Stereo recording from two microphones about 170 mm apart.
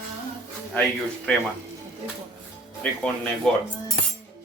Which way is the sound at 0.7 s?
5° left (ahead or behind).